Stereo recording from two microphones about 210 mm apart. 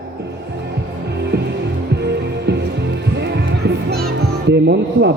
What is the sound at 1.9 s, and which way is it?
Music, 55° right (ahead or behind).